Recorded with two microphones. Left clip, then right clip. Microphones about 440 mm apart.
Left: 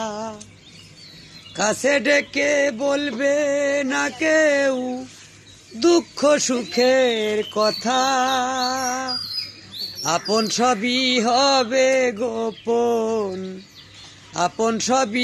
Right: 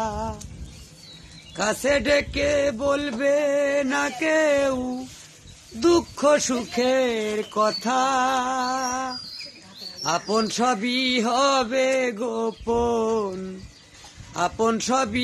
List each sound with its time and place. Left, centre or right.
0.0 s a sound: left
1.5 s mantra: left
5.8 s mantra: left